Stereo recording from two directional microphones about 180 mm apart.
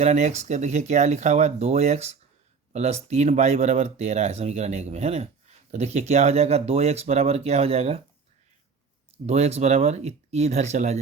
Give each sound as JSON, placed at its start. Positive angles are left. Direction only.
{"t": 0.0, "sound": "speech", "side_deg": -40}
{"t": 9.1, "sound": "speech", "side_deg": -35}